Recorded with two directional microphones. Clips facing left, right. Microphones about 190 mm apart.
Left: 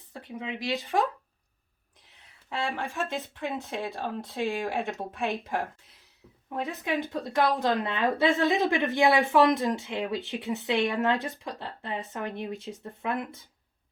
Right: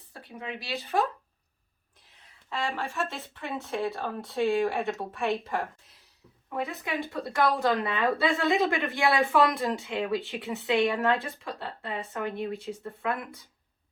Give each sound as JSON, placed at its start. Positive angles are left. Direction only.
{"t": 0.1, "sound": "speech", "side_deg": 20}
{"t": 2.5, "sound": "speech", "side_deg": 15}
{"t": 6.8, "sound": "speech", "side_deg": 20}